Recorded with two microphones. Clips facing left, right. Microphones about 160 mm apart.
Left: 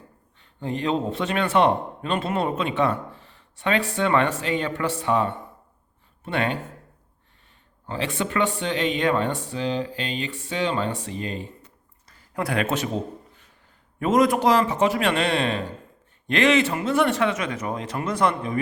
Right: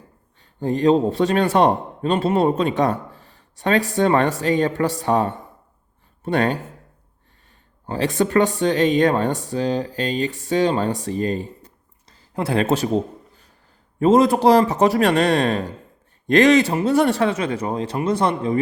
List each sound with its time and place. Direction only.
0.3 s a man's voice: 40° right (ahead or behind)
7.9 s a man's voice: 40° right (ahead or behind)
12.0 s a sound: 30° right (ahead or behind)
14.0 s a man's voice: 30° right (ahead or behind)